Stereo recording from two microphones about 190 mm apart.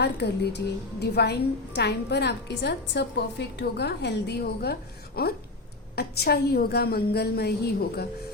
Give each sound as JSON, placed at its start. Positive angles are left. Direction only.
{"t": 0.0, "sound": "a woman's voice", "side_deg": 60}